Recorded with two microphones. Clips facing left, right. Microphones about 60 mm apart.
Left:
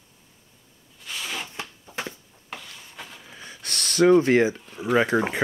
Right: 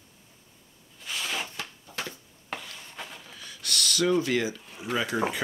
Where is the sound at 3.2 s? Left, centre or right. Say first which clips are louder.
Left 1 dB; left.